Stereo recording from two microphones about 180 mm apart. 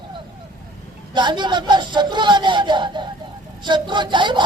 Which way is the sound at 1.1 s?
25° right (ahead or behind).